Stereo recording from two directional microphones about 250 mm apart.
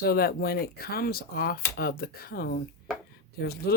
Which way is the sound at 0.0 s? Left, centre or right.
Left.